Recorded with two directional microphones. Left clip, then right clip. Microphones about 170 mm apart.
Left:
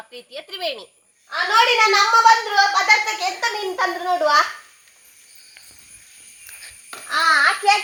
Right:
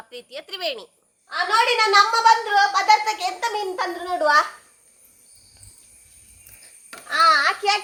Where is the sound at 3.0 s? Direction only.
35° right (ahead or behind).